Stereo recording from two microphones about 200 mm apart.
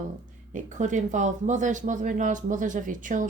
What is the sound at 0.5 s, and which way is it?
Speech, 40° right (ahead or behind).